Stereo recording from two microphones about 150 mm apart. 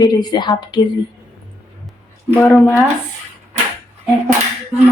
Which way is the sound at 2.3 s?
15° left (ahead or behind).